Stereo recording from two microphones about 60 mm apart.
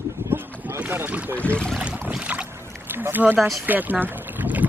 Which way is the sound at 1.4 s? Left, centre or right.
Centre.